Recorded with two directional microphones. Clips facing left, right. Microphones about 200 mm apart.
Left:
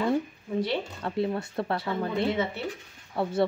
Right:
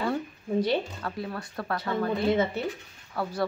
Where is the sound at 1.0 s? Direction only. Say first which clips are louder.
Left 6 dB; 25° left (ahead or behind).